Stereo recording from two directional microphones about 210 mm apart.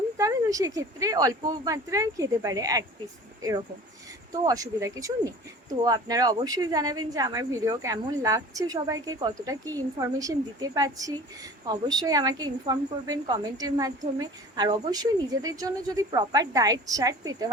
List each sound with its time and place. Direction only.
0.2 s speech: 15° right (ahead or behind)
4.3 s speech: 15° right (ahead or behind)